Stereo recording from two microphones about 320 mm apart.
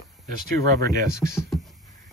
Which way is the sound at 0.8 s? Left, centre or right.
Centre.